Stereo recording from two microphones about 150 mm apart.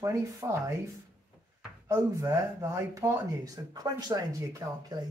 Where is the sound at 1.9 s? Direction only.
20° right (ahead or behind).